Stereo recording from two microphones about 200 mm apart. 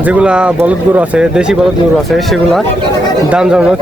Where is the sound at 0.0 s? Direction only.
5° right (ahead or behind).